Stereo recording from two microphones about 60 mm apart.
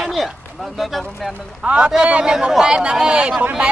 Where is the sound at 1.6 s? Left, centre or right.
Centre.